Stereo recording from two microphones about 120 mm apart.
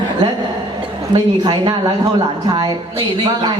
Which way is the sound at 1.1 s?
35° right (ahead or behind).